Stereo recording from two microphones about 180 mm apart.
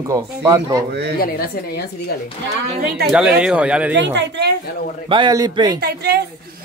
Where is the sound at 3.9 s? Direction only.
80° right.